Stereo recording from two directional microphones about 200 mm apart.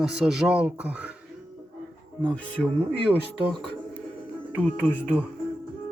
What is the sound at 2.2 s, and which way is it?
Speech, 5° left (ahead or behind).